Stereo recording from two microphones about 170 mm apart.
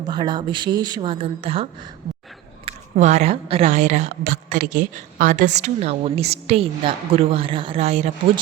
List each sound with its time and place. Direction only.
0.0 s speech: 25° right (ahead or behind)
2.6 s a woman's voice: 40° right (ahead or behind)
4.2 s a woman's voice: 55° right (ahead or behind); by 8.1 s 40° right (ahead or behind)